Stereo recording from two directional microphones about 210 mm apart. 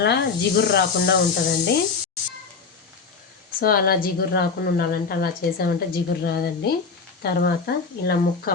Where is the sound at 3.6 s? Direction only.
45° left (ahead or behind).